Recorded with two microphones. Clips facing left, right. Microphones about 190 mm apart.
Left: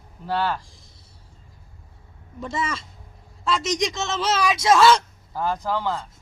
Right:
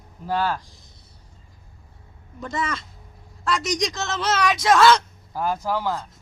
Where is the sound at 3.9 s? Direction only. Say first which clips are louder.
Left 1 dB; 25° left (ahead or behind).